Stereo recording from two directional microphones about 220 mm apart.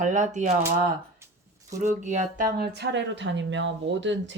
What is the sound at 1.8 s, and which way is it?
A woman's voice, 35° right (ahead or behind).